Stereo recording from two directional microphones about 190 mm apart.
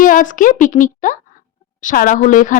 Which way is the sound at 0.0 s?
45° left (ahead or behind).